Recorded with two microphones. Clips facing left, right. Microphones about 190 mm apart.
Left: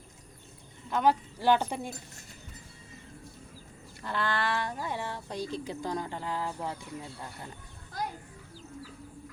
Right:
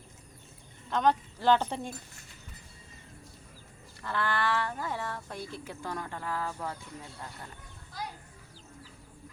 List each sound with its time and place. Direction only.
0.9 s speech: 10° left (ahead or behind)
4.0 s speech: 15° left (ahead or behind)